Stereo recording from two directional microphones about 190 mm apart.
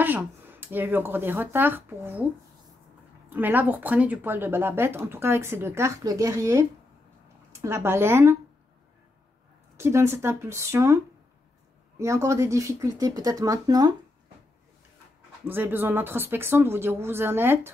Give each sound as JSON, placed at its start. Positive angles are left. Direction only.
{"t": 0.0, "sound": "speech", "side_deg": -10}
{"t": 3.3, "sound": "speech", "side_deg": -10}
{"t": 7.6, "sound": "speech", "side_deg": -15}
{"t": 9.8, "sound": "speech", "side_deg": -15}
{"t": 12.0, "sound": "speech", "side_deg": -15}
{"t": 15.4, "sound": "speech", "side_deg": -10}